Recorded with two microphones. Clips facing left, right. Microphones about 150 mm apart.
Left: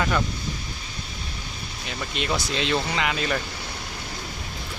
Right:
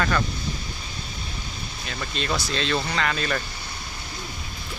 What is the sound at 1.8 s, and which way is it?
Speech, 15° left (ahead or behind).